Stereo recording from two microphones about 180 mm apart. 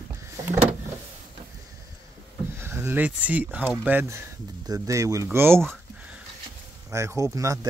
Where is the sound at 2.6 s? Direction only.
10° right (ahead or behind).